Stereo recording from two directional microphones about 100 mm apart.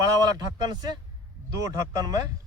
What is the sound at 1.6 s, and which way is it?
Speech, 35° right (ahead or behind).